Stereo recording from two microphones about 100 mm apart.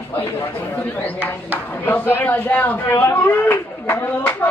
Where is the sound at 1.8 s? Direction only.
20° left (ahead or behind).